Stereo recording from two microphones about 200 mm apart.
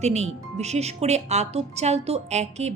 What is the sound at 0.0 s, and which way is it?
Speech, 35° right (ahead or behind).